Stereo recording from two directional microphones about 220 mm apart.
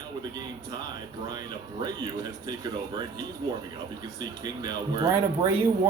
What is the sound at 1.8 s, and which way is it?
A man's voice, 20° right (ahead or behind).